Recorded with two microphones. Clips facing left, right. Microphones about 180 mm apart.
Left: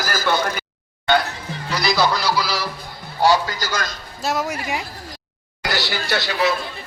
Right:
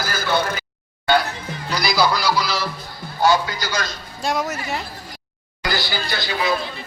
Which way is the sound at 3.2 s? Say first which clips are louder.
Left 1 dB; 35° left (ahead or behind).